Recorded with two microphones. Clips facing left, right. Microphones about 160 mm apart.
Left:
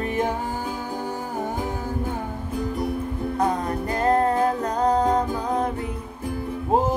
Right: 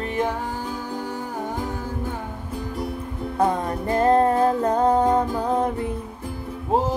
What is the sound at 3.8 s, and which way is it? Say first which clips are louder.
Music: right 3 dB; 25° right (ahead or behind).